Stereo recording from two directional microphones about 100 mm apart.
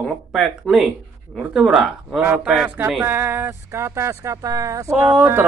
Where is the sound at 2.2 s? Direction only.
10° right (ahead or behind).